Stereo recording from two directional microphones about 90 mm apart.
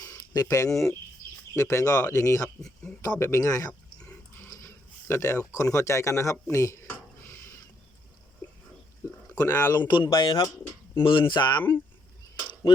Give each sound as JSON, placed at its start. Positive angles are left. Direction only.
{"t": 0.0, "sound": "a sound", "side_deg": 35}
{"t": 0.7, "sound": "speech", "side_deg": 5}
{"t": 1.5, "sound": "speech", "side_deg": 35}
{"t": 2.6, "sound": "speech", "side_deg": 5}
{"t": 3.0, "sound": "speech", "side_deg": 35}
{"t": 3.7, "sound": "a sound", "side_deg": 10}
{"t": 4.4, "sound": "dog", "side_deg": 35}
{"t": 5.5, "sound": "speech", "side_deg": 35}
{"t": 9.0, "sound": "a sound", "side_deg": 35}
{"t": 9.4, "sound": "speech", "side_deg": 35}
{"t": 9.8, "sound": "speech", "side_deg": 65}